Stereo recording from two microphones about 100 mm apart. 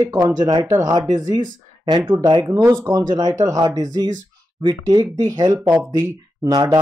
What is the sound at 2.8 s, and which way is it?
Speech, 40° right (ahead or behind).